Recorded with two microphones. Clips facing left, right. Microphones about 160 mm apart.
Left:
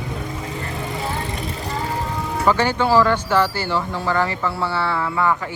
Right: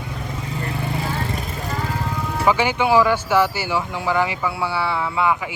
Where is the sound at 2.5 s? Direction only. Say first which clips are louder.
Even; 15° right (ahead or behind).